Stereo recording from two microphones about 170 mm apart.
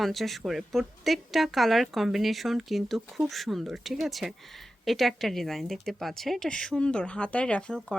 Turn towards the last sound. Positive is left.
turn(degrees=5)  # may be behind; listen again after turning